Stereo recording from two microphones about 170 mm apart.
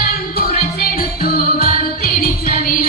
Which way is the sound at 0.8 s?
60° left (ahead or behind).